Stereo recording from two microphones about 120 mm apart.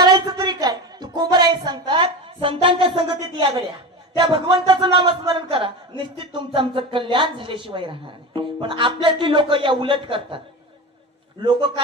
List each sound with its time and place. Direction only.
0.0 s a sound: 35° right (ahead or behind)
4.2 s a man's voice: 45° right (ahead or behind)
11.4 s a man's voice: 40° right (ahead or behind)